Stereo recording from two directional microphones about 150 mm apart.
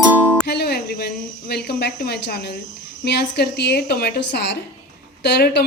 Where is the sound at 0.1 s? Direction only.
15° right (ahead or behind).